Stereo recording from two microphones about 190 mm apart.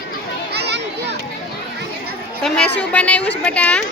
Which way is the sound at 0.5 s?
60° right (ahead or behind).